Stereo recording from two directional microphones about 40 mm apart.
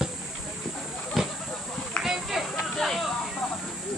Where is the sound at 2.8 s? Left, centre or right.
Centre.